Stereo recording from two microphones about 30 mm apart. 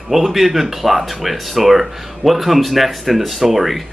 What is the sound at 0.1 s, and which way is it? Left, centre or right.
Speech, centre.